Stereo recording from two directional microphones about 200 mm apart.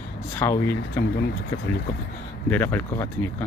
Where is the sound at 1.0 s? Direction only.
60° left (ahead or behind).